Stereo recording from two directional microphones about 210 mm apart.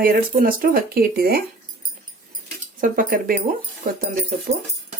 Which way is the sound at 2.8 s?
40° right (ahead or behind).